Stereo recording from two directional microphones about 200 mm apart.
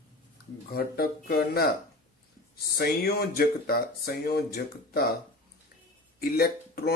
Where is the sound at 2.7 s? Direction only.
50° left (ahead or behind).